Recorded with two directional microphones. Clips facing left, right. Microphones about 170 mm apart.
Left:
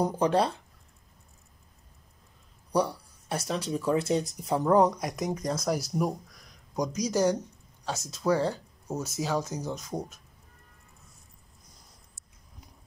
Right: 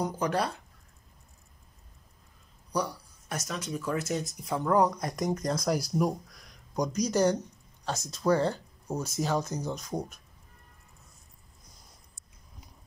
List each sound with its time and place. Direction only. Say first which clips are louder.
0.0 s speech: left 4 dB; 30° left (ahead or behind)
2.7 s speech: left 5 dB; 30° left (ahead or behind)
4.6 s speech: left 2 dB; 20° left (ahead or behind); by 10.0 s 5° left (ahead or behind)